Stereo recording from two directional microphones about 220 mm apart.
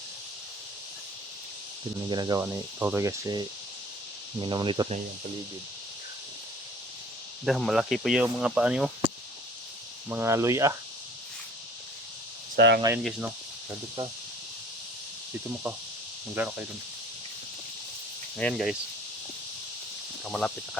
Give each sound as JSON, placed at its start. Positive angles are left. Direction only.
{"t": 2.0, "sound": "speech", "side_deg": -20}
{"t": 2.4, "sound": "cricket", "side_deg": -10}
{"t": 4.4, "sound": "speech", "side_deg": -20}
{"t": 7.4, "sound": "speech", "side_deg": 0}
{"t": 10.1, "sound": "cricket", "side_deg": -10}
{"t": 12.5, "sound": "speech", "side_deg": -50}
{"t": 13.0, "sound": "speech", "side_deg": 0}
{"t": 16.3, "sound": "cricket", "side_deg": -5}
{"t": 18.3, "sound": "speech", "side_deg": 5}
{"t": 20.2, "sound": "speech", "side_deg": 5}